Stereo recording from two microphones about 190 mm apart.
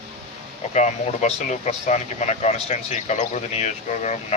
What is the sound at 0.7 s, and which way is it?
Speech, 35° left (ahead or behind).